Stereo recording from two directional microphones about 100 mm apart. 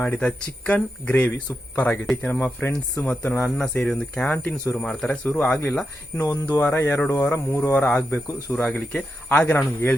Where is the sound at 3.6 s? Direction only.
5° left (ahead or behind).